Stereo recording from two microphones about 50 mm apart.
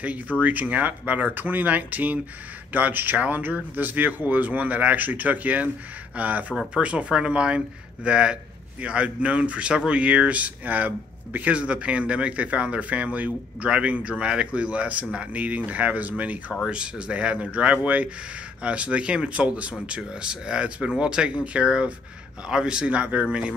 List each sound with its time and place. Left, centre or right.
0.0 s speech: right
16.6 s speech: centre
22.8 s speech: right